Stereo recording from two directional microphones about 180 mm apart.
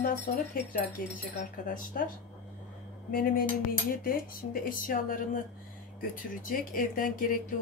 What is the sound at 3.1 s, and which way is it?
Speech, 55° left (ahead or behind).